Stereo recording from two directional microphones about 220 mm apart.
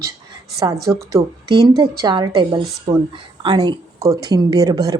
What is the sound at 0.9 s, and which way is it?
A woman's voice, 15° right (ahead or behind).